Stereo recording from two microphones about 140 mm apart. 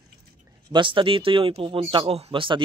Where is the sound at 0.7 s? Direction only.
35° right (ahead or behind).